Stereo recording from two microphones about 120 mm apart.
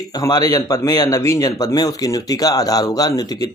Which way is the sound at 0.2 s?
35° left (ahead or behind).